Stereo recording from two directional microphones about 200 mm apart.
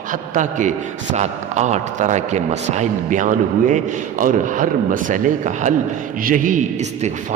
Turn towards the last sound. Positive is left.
turn(degrees=-35)  # may be behind; listen again after turning